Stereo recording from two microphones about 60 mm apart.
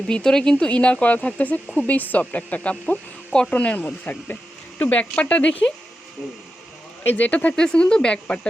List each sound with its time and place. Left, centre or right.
0.1 s speech: centre
7.0 s speech: left